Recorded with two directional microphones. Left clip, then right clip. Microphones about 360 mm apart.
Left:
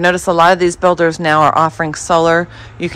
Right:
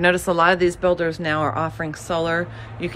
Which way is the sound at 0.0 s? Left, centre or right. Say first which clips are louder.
Left 6 dB; centre.